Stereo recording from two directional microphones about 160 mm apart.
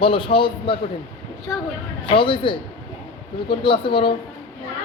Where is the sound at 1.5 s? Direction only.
20° left (ahead or behind).